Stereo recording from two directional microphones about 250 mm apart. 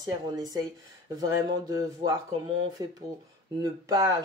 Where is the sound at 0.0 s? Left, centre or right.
Centre.